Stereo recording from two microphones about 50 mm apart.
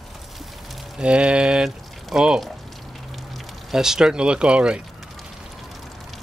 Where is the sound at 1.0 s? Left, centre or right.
Centre.